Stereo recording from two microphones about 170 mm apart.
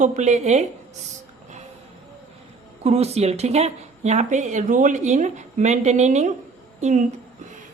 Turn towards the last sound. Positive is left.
turn(degrees=-45)  # may be behind; listen again after turning